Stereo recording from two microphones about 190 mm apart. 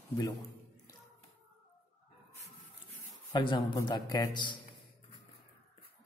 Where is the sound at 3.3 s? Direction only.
20° left (ahead or behind).